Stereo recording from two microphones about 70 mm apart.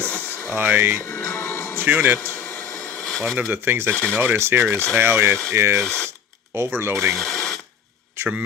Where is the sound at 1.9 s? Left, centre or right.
Right.